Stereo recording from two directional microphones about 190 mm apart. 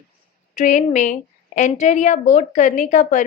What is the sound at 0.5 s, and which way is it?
A woman's voice, 40° left (ahead or behind).